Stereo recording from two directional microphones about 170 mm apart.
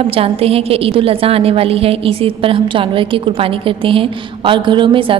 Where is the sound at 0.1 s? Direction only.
35° right (ahead or behind).